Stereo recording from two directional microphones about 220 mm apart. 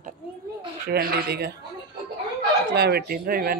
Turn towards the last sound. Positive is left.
turn(degrees=-40)  # may be behind; listen again after turning